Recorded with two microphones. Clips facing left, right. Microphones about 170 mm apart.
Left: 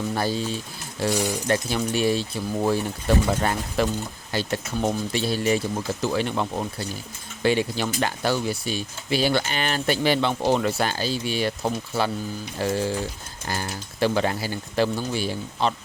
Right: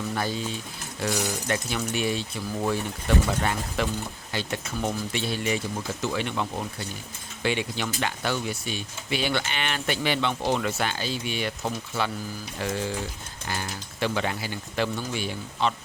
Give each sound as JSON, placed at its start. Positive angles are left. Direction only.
{"t": 0.1, "sound": "speech", "side_deg": 35}